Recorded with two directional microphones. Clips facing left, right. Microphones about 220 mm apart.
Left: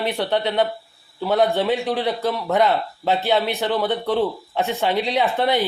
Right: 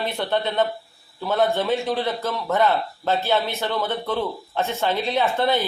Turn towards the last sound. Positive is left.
turn(degrees=15)  # may be behind; listen again after turning